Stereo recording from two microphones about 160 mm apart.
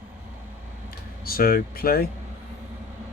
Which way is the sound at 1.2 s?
70° left (ahead or behind).